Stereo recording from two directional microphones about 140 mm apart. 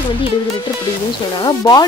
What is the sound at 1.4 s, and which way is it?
Speech, 30° left (ahead or behind).